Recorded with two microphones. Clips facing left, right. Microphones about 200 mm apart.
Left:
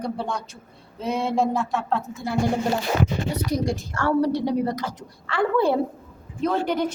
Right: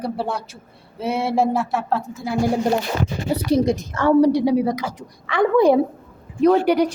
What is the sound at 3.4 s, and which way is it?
Speech, 25° right (ahead or behind).